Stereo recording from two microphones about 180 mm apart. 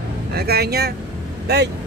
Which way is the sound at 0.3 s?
60° right (ahead or behind).